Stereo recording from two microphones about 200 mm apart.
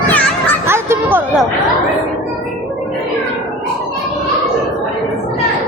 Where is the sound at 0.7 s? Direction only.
10° right (ahead or behind).